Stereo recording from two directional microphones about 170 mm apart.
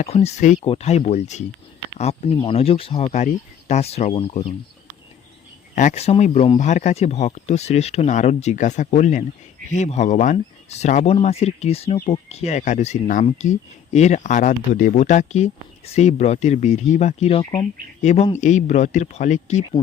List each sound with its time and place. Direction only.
0.0 s speech: 40° left (ahead or behind)
3.1 s speech: 45° left (ahead or behind)
5.7 s speech: 45° left (ahead or behind)